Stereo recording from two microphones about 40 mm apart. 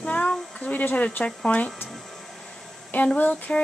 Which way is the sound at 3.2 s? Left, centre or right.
Left.